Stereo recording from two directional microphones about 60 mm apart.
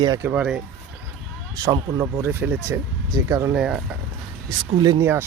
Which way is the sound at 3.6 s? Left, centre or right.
Centre.